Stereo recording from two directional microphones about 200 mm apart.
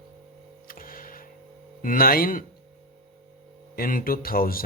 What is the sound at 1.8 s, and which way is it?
Speech, 45° left (ahead or behind).